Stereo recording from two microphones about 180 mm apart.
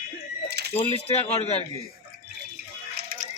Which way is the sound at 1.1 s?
35° left (ahead or behind).